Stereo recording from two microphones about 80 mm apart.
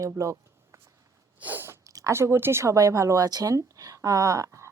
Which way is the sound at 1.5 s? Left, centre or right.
Right.